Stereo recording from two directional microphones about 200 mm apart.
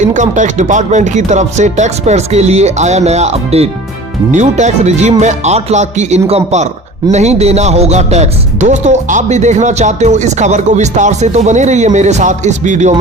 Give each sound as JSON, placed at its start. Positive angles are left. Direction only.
{"t": 0.0, "sound": "speech", "side_deg": -35}